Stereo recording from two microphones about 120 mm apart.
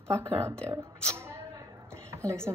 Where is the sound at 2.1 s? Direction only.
20° right (ahead or behind).